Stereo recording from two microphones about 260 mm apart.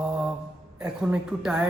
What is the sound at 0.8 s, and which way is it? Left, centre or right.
Speech, centre.